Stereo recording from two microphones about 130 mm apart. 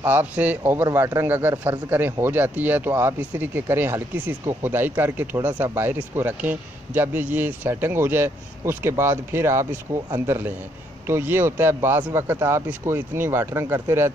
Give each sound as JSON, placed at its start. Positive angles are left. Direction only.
{"t": 0.0, "sound": "speech", "side_deg": -15}